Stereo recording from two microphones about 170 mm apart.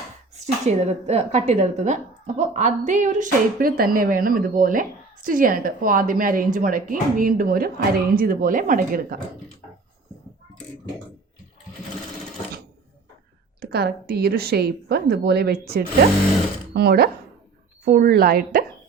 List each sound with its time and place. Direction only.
0.3 s a woman's voice: 40° right (ahead or behind)
13.6 s speech: 70° right (ahead or behind)
17.8 s a woman's voice: 60° right (ahead or behind)